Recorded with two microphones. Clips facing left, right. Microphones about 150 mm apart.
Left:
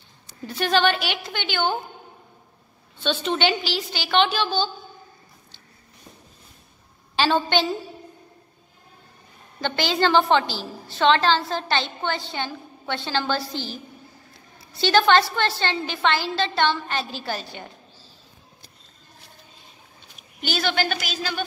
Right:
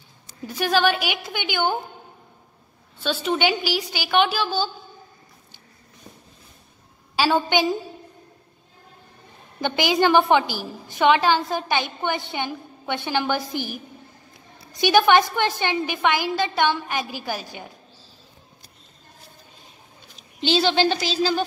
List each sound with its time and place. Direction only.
0.5 s a woman's voice: 5° right (ahead or behind)
3.0 s a woman's voice: 5° right (ahead or behind)
7.2 s a woman's voice: 10° right (ahead or behind)
9.6 s a woman's voice: 15° right (ahead or behind)
20.3 s a woman's voice: 25° right (ahead or behind)